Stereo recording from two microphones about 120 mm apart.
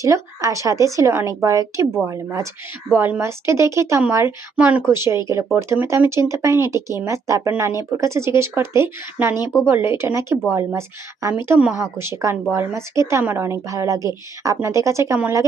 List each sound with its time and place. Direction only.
0.0 s a woman's voice: 25° right (ahead or behind)
4.5 s speech: 10° right (ahead or behind)
4.9 s a woman's voice: 20° right (ahead or behind)